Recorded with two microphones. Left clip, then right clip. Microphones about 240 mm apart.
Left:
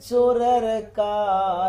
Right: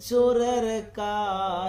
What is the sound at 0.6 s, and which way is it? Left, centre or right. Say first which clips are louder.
Mantra: left 5 dB; right.